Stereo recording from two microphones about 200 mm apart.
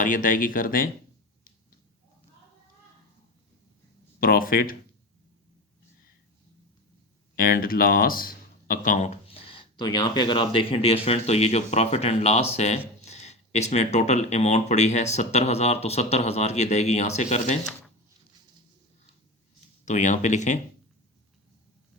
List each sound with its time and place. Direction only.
0.0 s speech: 40° left (ahead or behind)
4.2 s speech: 45° left (ahead or behind)
7.3 s speech: 45° left (ahead or behind)
19.8 s speech: 35° left (ahead or behind)